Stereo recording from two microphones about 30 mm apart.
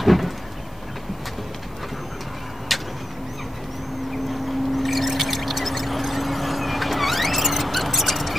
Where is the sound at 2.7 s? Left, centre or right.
Centre.